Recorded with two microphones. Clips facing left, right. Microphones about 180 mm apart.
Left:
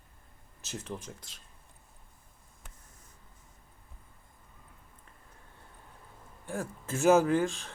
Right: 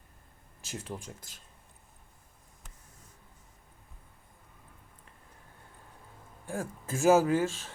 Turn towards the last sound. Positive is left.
turn(degrees=-5)  # may be behind; listen again after turning